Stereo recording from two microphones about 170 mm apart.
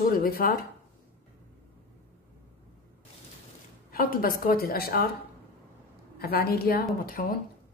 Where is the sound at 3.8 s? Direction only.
60° left (ahead or behind).